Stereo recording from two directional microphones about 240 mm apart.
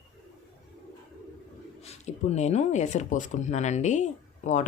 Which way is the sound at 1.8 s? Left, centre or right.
Left.